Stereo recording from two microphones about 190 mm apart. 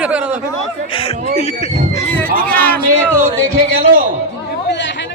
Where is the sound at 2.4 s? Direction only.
10° left (ahead or behind).